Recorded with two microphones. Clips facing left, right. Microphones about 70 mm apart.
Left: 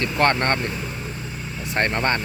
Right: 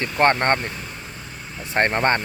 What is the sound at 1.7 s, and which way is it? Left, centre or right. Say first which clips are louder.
Speech: right 3 dB; right.